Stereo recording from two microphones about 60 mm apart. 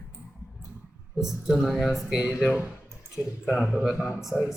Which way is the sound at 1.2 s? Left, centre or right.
Centre.